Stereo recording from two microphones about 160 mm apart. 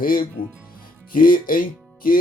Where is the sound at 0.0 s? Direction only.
65° left (ahead or behind).